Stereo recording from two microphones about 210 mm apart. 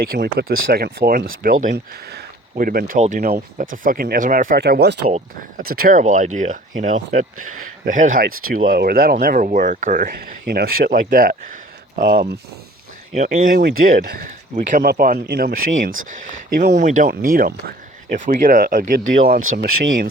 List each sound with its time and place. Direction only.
0.0 s speech: 50° right (ahead or behind)
5.0 s speech: 30° right (ahead or behind)
5.6 s speech: 45° right (ahead or behind)
16.7 s speech: 35° right (ahead or behind)